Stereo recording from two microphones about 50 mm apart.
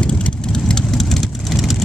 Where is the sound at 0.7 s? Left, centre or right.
Centre.